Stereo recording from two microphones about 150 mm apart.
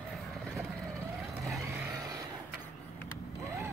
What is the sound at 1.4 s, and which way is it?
Vehicle, centre (ahead or behind).